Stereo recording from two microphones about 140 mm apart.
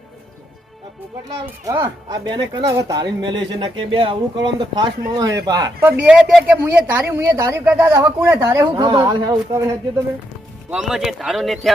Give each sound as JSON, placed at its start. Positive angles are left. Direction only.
{"t": 1.6, "sound": "speech", "side_deg": -20}
{"t": 5.8, "sound": "speech", "side_deg": -10}
{"t": 10.7, "sound": "speech", "side_deg": -5}